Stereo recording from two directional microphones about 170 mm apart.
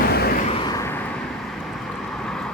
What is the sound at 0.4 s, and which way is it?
Vehicle, 35° left (ahead or behind).